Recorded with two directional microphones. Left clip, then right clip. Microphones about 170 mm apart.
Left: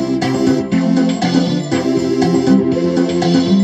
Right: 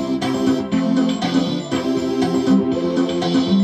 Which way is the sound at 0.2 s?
20° left (ahead or behind).